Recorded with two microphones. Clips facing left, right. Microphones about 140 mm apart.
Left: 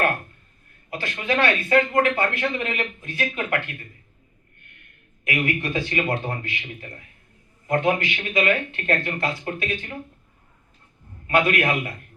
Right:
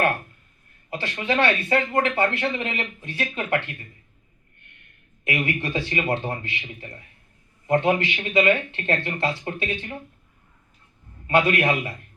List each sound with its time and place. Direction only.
0.9 s speech: 30° right (ahead or behind)
5.2 s speech: 30° right (ahead or behind)
11.3 s speech: 30° right (ahead or behind)